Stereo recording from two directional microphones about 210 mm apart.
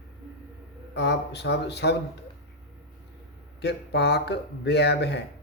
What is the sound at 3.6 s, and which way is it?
Speech, 55° left (ahead or behind).